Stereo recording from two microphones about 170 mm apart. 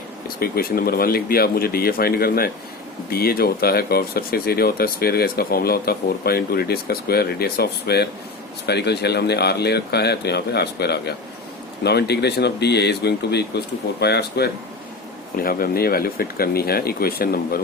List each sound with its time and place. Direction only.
0.3 s speech: 60° left (ahead or behind)
15.4 s speech: 60° left (ahead or behind)